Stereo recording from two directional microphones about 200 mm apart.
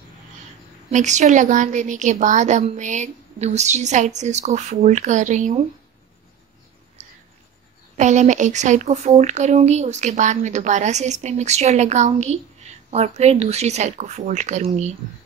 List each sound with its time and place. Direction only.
0.9 s a woman's voice: 35° right (ahead or behind)
8.0 s a woman's voice: 35° right (ahead or behind)